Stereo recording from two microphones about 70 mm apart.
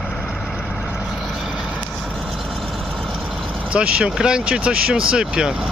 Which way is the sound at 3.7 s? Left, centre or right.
Centre.